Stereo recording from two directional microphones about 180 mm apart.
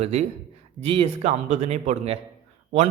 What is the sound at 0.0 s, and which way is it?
Speech, 35° right (ahead or behind).